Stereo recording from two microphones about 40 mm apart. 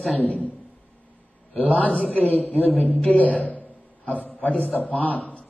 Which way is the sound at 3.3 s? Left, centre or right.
Left.